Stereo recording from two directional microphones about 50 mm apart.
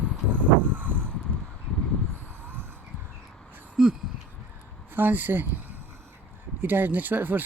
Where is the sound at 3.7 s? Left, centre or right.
Centre.